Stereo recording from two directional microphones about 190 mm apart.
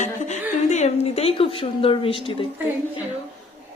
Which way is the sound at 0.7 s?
35° left (ahead or behind).